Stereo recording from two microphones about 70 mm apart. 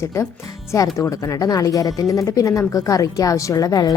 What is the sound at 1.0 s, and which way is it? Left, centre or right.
A woman's voice, left.